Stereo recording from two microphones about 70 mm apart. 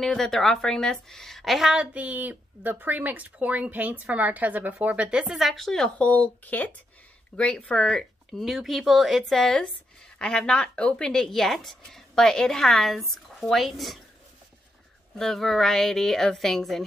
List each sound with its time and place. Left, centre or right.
0.0 s speech: centre
1.7 s a woman's voice: centre
5.3 s speech: centre
5.9 s speech: left; by 13.9 s centre
15.1 s speech: centre